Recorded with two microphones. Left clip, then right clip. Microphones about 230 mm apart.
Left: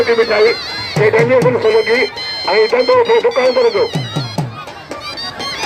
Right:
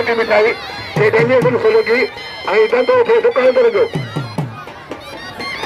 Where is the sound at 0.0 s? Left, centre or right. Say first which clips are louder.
Left 2 dB; right.